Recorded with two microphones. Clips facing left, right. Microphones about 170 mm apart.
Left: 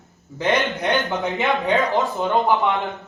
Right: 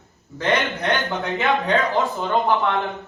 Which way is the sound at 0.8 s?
20° left (ahead or behind).